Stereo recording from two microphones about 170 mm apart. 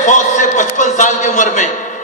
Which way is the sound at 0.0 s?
45° left (ahead or behind).